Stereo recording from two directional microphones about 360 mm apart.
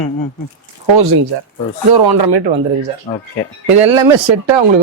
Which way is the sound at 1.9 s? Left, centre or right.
Right.